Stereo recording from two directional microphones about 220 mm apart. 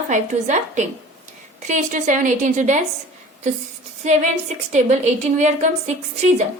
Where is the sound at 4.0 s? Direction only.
30° right (ahead or behind).